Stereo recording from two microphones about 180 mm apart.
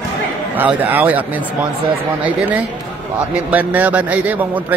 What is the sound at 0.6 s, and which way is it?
Speech, 10° right (ahead or behind).